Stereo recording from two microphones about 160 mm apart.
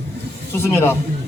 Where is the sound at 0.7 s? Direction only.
15° left (ahead or behind).